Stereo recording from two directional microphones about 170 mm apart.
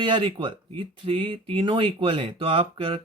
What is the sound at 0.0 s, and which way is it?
Speech, 30° right (ahead or behind).